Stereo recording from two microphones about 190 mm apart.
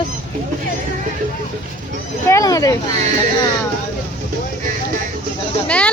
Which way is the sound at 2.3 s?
20° left (ahead or behind).